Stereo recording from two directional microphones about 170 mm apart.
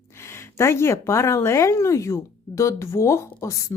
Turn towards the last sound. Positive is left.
turn(degrees=15)  # may be behind; listen again after turning